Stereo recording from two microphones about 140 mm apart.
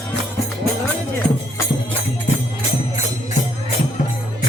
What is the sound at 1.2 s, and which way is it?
Music, 5° left (ahead or behind).